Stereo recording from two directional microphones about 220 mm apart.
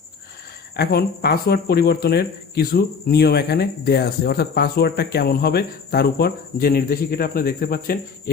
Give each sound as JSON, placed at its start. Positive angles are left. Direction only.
{"t": 0.8, "sound": "speech", "side_deg": 45}